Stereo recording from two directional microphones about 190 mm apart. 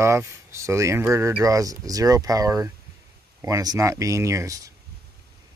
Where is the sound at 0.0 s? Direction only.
15° right (ahead or behind).